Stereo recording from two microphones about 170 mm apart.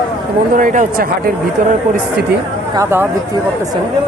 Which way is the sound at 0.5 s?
50° right (ahead or behind).